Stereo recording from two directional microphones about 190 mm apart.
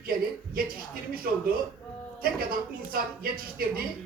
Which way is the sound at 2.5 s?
50° right (ahead or behind).